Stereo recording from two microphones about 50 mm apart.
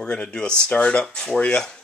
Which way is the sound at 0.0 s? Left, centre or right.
Left.